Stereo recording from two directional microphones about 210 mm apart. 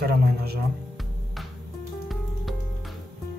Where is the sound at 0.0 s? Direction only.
50° right (ahead or behind).